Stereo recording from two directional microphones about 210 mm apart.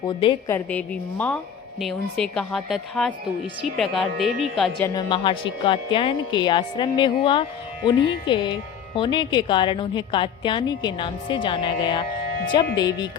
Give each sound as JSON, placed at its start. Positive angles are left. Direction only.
{"t": 0.0, "sound": "a woman's voice", "side_deg": 25}
{"t": 0.4, "sound": "a woman's voice", "side_deg": 10}
{"t": 4.9, "sound": "a woman's voice", "side_deg": 25}